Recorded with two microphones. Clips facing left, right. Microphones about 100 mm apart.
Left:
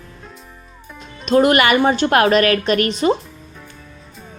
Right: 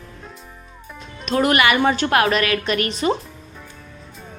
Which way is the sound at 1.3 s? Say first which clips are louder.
Left 4 dB; 30° left (ahead or behind).